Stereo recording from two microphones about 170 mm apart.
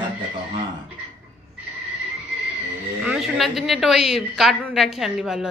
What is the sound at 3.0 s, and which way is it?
A woman's voice, 5° right (ahead or behind).